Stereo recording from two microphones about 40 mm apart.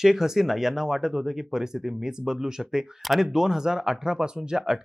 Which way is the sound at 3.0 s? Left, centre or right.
Centre.